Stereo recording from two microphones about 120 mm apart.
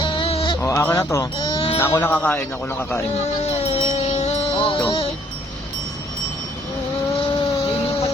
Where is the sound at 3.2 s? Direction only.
65° left (ahead or behind); by 4.8 s 50° left (ahead or behind).